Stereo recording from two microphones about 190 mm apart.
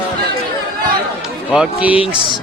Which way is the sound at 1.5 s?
5° right (ahead or behind).